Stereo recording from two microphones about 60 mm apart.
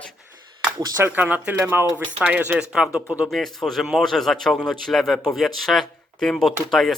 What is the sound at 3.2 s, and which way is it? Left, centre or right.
A man's voice, centre.